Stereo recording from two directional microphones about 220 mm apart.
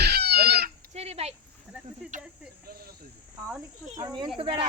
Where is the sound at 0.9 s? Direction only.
30° right (ahead or behind).